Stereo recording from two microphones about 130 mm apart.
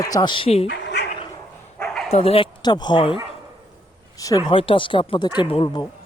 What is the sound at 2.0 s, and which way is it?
Speech, 50° left (ahead or behind).